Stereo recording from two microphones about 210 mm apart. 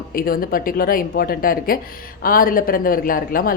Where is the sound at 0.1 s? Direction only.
45° left (ahead or behind).